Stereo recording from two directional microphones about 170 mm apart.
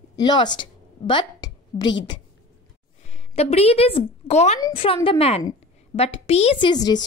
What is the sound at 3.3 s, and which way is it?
A woman's voice, 35° left (ahead or behind).